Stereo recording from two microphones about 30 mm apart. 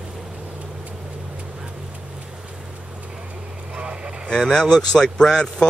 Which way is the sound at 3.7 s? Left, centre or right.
Right.